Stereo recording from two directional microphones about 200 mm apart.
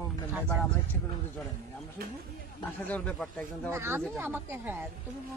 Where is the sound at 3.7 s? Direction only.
15° right (ahead or behind).